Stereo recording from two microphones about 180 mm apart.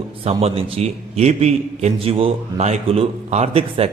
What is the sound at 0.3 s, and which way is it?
A man's voice, 30° right (ahead or behind).